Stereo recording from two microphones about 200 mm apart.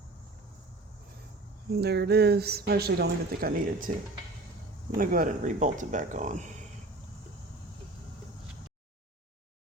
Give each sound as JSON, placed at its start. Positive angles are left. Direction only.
{"t": 1.7, "sound": "speech", "side_deg": -55}
{"t": 4.9, "sound": "speech", "side_deg": -45}